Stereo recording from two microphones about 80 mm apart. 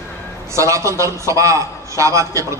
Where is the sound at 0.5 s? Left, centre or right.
Right.